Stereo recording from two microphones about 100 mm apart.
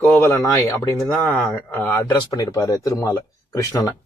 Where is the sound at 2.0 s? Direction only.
40° left (ahead or behind).